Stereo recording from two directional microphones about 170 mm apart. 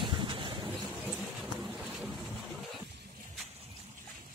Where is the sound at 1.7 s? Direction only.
5° right (ahead or behind).